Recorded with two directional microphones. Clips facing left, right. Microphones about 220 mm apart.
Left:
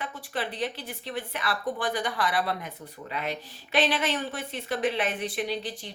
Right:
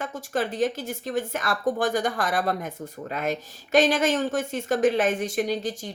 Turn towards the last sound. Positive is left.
turn(degrees=-45)  # may be behind; listen again after turning